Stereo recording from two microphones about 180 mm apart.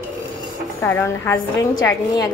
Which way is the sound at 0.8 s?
10° left (ahead or behind).